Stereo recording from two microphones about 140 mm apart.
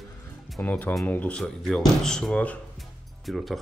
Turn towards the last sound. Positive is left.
turn(degrees=0)  # may be behind; listen again after turning